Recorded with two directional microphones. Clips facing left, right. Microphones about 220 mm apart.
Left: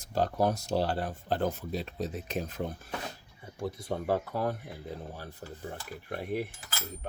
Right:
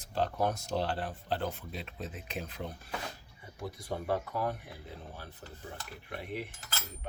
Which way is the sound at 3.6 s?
25° left (ahead or behind).